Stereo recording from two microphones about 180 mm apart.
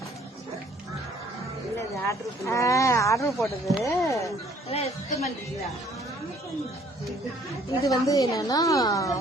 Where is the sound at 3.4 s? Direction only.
Centre (ahead or behind).